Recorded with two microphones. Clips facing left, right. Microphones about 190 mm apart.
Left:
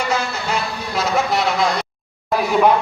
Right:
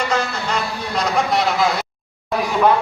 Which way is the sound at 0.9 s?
Centre (ahead or behind).